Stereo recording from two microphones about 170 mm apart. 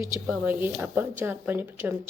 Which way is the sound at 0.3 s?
10° right (ahead or behind).